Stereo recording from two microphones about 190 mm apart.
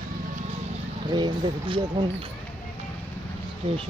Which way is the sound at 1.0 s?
25° right (ahead or behind).